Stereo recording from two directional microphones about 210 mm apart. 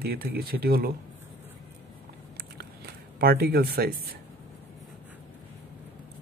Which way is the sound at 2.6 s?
50° right (ahead or behind).